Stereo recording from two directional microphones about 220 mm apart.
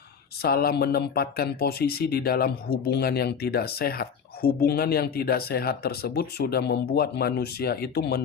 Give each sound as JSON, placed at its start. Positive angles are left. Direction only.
{"t": 0.4, "sound": "speech", "side_deg": 45}